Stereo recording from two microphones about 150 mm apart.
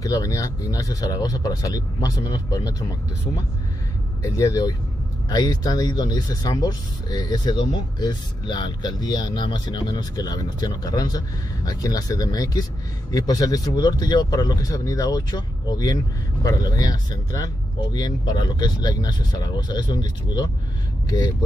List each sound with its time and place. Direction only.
0.0 s speech: 25° left (ahead or behind)
4.2 s speech: 20° left (ahead or behind)